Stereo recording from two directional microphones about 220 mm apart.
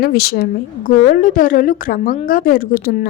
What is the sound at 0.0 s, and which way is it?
A woman's voice, 45° left (ahead or behind).